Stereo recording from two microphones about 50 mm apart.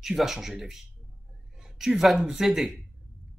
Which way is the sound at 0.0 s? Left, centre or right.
Centre.